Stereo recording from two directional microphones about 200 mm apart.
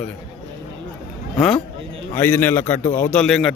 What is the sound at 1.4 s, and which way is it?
A man's voice, 5° left (ahead or behind).